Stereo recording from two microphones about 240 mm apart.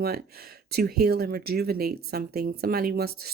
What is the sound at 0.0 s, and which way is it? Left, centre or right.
Speech, right.